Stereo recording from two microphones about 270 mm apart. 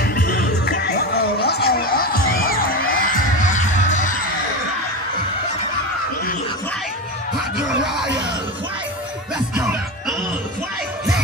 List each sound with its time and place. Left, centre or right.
0.0 s music: left
7.3 s a sound: centre
9.6 s music: centre